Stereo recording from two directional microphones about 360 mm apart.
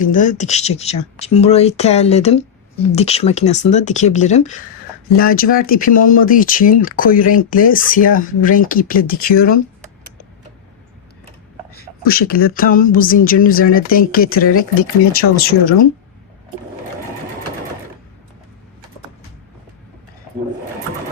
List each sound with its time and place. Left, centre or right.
0.0 s speech: left
11.7 s speech: left